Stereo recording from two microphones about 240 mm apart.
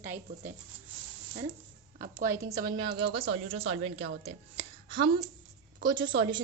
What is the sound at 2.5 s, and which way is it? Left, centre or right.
A woman's voice, centre.